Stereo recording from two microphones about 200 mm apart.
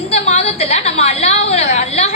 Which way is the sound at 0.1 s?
35° left (ahead or behind).